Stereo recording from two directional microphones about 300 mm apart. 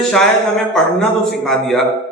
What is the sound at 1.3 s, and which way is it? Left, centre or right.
Speech, centre.